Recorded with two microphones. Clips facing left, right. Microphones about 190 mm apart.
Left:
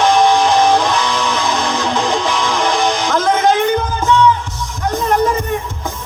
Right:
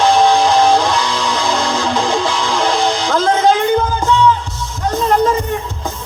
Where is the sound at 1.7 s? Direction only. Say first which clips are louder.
Right 1 dB; 20° left (ahead or behind).